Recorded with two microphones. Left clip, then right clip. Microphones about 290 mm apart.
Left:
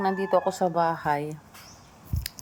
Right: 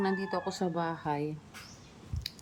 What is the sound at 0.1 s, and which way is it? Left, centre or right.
Speech, left.